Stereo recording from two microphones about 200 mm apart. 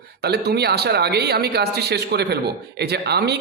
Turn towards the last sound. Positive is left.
turn(degrees=-55)  # may be behind; listen again after turning